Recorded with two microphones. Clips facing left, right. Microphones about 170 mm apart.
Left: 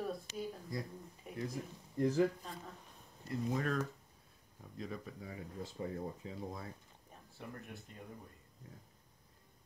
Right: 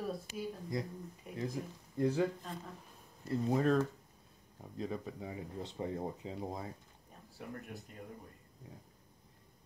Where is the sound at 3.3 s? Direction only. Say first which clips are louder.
Right 6 dB; 30° right (ahead or behind).